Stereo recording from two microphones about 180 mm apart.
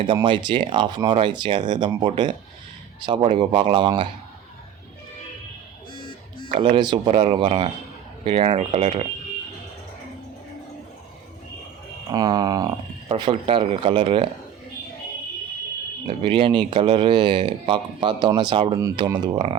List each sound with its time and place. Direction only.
0.0 s speech: 25° right (ahead or behind)
5.9 s buzzer: 30° left (ahead or behind)
6.6 s speech: 25° right (ahead or behind)
12.1 s speech: 20° right (ahead or behind)
16.0 s speech: 30° right (ahead or behind)